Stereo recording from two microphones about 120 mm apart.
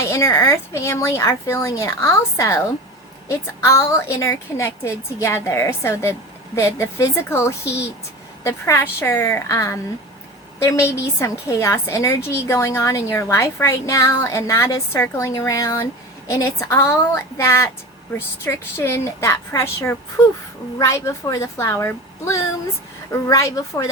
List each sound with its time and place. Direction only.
0.1 s a woman's voice: 25° left (ahead or behind)